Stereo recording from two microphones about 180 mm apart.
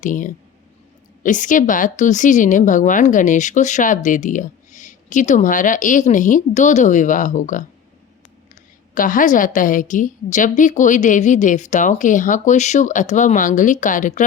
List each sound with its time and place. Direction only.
0.0 s a woman's voice: 45° left (ahead or behind)
9.0 s a woman's voice: 50° left (ahead or behind)